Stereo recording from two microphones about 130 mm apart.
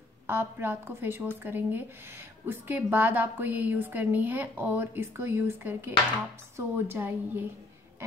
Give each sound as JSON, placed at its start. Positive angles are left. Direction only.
{"t": 0.3, "sound": "a woman's voice", "side_deg": -20}